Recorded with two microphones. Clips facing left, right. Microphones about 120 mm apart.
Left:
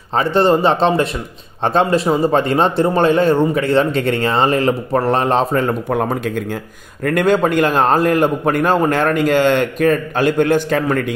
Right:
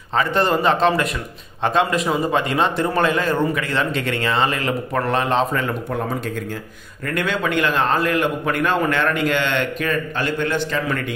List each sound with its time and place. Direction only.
0.1 s a man's voice: 30° left (ahead or behind)
5.9 s a man's voice: 60° left (ahead or behind)
7.1 s a man's voice: 45° left (ahead or behind)